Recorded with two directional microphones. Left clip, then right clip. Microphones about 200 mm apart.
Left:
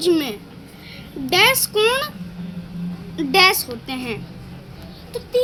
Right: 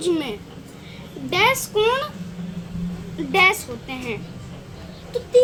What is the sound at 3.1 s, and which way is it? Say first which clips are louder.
A child's voice: left 2 dB; 50° left (ahead or behind).